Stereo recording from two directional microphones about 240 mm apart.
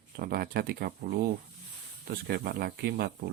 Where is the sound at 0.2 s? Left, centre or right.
Right.